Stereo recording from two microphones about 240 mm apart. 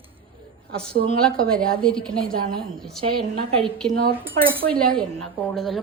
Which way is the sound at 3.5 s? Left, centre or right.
Right.